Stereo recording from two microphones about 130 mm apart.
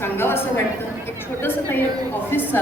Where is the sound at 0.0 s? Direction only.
20° left (ahead or behind).